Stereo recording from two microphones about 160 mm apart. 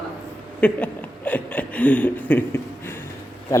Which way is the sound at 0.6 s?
10° left (ahead or behind).